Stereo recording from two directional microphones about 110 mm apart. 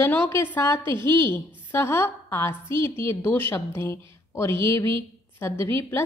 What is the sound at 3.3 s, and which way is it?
A woman's voice, 20° left (ahead or behind).